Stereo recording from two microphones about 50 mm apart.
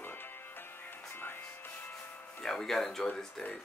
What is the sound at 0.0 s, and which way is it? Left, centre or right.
Music, left.